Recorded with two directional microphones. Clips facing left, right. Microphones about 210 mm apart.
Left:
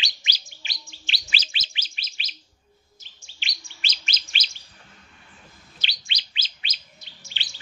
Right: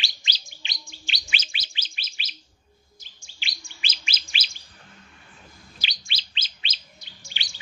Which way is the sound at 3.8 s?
5° right (ahead or behind).